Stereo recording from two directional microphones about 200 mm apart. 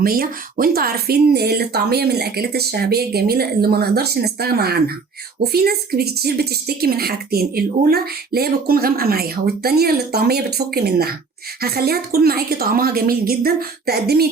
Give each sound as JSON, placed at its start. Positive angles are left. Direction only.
{"t": 0.0, "sound": "speech", "side_deg": -45}